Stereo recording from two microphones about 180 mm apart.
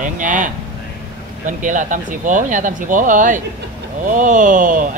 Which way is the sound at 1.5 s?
45° right (ahead or behind).